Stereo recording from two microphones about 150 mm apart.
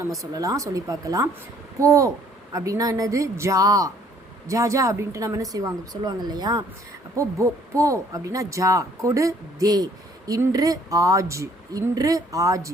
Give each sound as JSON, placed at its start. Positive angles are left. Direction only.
{"t": 0.1, "sound": "speech", "side_deg": -25}